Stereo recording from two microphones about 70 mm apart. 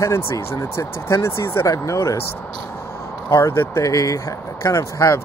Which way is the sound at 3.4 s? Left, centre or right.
Left.